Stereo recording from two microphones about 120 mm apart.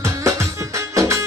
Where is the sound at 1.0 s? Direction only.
25° right (ahead or behind).